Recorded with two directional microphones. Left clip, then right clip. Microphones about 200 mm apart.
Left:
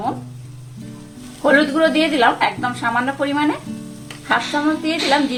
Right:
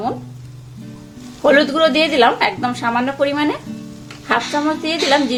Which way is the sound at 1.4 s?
30° right (ahead or behind).